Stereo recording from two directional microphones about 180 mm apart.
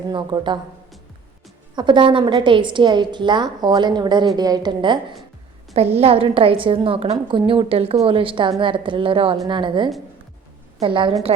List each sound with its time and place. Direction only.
0.1 s a woman's voice: 25° right (ahead or behind)
1.7 s a woman's voice: 25° right (ahead or behind)